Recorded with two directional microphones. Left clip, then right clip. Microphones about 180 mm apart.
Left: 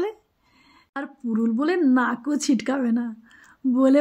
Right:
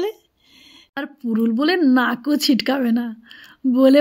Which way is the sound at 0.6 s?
30° right (ahead or behind).